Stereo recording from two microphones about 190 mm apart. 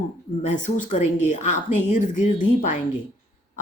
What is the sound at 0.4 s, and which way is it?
A woman's voice, 40° left (ahead or behind).